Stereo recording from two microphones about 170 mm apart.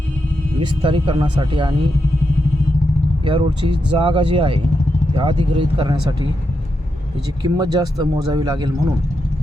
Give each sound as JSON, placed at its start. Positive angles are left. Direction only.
{"t": 0.8, "sound": "a man's voice", "side_deg": -30}
{"t": 3.2, "sound": "speech", "side_deg": -30}
{"t": 7.4, "sound": "a man's voice", "side_deg": -25}